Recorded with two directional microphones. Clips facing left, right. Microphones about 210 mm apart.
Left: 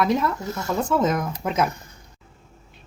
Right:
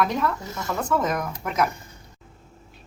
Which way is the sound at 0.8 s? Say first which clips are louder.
Left 2 dB; 25° left (ahead or behind).